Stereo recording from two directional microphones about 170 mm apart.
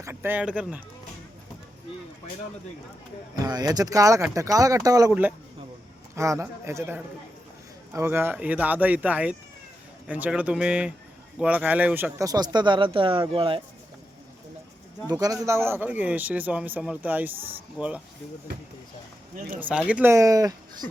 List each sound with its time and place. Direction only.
0.0 s a man's voice: 15° right (ahead or behind)
3.3 s speech: 20° right (ahead or behind)
6.1 s a man's voice: 15° right (ahead or behind)
15.1 s a man's voice: 20° right (ahead or behind)
19.5 s a man's voice: 10° right (ahead or behind)